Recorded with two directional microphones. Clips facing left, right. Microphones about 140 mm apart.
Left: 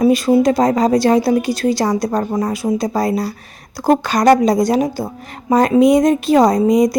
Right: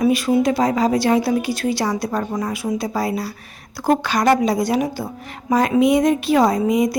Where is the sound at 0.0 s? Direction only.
35° left (ahead or behind).